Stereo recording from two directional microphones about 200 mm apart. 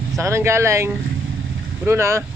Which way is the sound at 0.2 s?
15° right (ahead or behind).